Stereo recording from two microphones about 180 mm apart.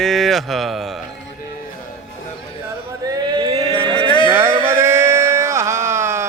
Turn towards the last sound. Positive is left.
turn(degrees=-15)  # may be behind; listen again after turning